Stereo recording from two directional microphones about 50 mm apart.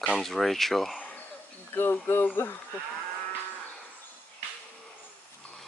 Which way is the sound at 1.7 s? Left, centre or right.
Left.